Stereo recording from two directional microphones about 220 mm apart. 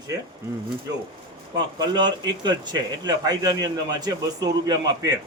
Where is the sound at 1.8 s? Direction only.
20° right (ahead or behind).